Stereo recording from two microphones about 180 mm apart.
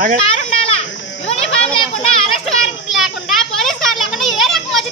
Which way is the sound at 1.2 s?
35° left (ahead or behind).